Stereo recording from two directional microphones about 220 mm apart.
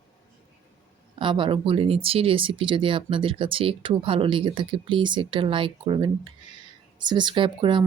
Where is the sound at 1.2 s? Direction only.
20° right (ahead or behind).